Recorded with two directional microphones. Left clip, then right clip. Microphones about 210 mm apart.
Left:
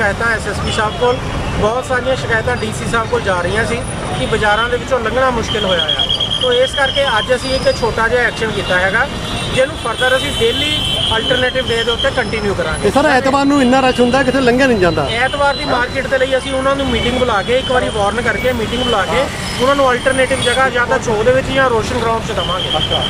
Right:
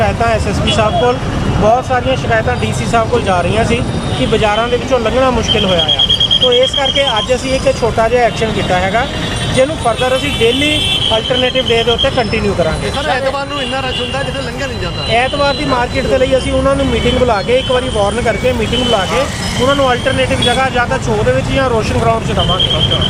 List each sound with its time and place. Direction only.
0.0 s speech: 10° right (ahead or behind)
1.6 s speech: 5° right (ahead or behind)
13.0 s speech: 30° left (ahead or behind)
15.1 s speech: 10° right (ahead or behind)
19.6 s speech: centre (ahead or behind)